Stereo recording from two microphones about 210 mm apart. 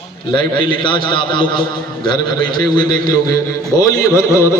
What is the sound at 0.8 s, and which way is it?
Speech, 25° left (ahead or behind).